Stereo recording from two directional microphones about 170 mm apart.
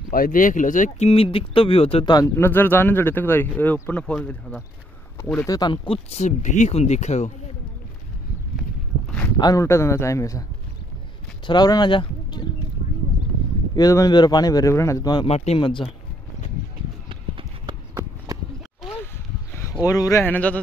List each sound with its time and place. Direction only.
0.1 s speech: 55° left (ahead or behind); by 2.1 s 35° left (ahead or behind)
2.1 s speech: 15° left (ahead or behind)
5.6 s speech: 30° left (ahead or behind)
9.4 s speech: 20° left (ahead or behind)
11.4 s speech: 25° left (ahead or behind)
13.7 s speech: 20° left (ahead or behind)
15.2 s speech: 35° left (ahead or behind)
17.1 s clip-clop: 30° right (ahead or behind)
19.9 s speech: 20° left (ahead or behind)